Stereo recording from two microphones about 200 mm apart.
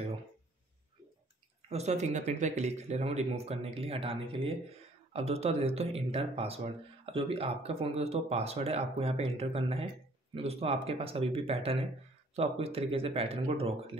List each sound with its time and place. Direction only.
1.7 s speech: 35° right (ahead or behind)